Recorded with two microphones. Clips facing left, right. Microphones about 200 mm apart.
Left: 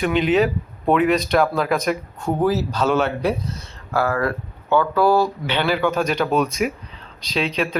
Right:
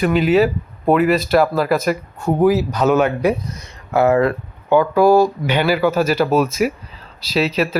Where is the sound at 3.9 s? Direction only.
20° right (ahead or behind); by 7.7 s 5° right (ahead or behind).